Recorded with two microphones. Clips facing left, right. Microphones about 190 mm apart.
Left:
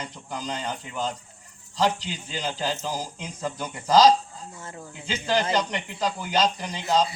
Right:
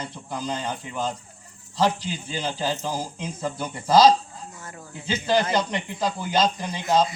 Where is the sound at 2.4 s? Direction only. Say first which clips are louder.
Right 1 dB; 15° right (ahead or behind).